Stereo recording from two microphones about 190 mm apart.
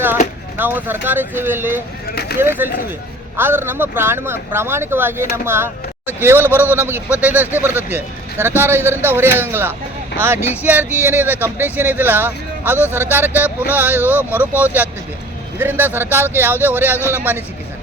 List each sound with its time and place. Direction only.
0.5 s speech: 10° right (ahead or behind)